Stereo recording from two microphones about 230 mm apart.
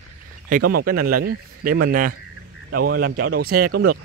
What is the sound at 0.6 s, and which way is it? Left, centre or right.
Speech, right.